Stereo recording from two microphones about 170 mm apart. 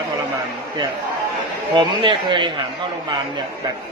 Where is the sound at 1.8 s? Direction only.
30° right (ahead or behind).